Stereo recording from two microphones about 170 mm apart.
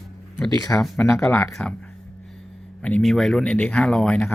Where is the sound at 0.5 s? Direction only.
20° left (ahead or behind).